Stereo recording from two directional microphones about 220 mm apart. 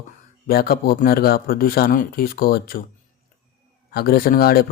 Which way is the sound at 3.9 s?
40° left (ahead or behind).